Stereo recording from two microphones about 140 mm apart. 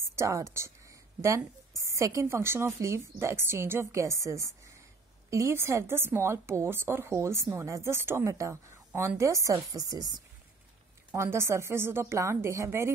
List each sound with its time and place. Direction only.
0.1 s a woman's voice: 20° right (ahead or behind)
1.8 s speech: 20° right (ahead or behind)